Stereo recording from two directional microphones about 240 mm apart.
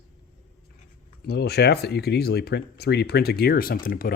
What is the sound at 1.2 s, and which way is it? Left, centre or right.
Speech, left.